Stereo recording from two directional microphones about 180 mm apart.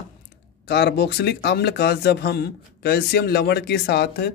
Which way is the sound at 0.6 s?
65° left (ahead or behind).